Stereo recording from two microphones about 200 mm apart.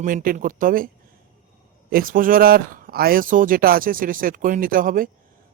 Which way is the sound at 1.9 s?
45° right (ahead or behind).